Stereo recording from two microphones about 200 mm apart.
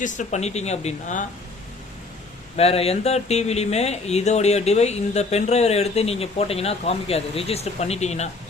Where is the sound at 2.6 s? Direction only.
30° left (ahead or behind).